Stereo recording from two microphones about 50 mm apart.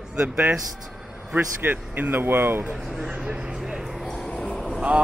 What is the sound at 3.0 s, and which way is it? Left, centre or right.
Speech, centre.